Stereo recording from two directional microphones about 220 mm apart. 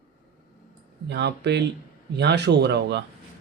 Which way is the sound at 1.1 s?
50° right (ahead or behind).